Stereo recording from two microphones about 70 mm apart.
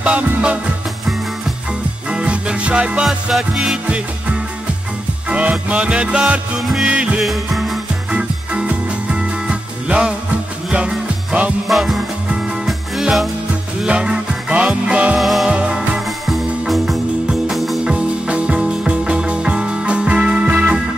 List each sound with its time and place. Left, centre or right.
0.0 s music: centre
2.0 s music: centre
5.3 s music: centre
7.2 s music: centre
8.2 s music: centre
11.6 s music: centre
13.8 s music: centre
15.1 s music: centre
15.4 s music: centre
16.3 s music: centre
17.8 s music: centre